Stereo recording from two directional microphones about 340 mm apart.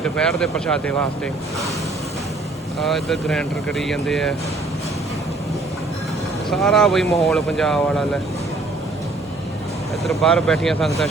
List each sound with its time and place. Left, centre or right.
0.0 s speech: centre
2.8 s speech: centre
6.5 s speech: centre
10.0 s speech: centre